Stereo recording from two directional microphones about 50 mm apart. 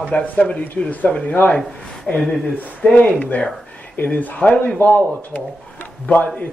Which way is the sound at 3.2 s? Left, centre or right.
Left.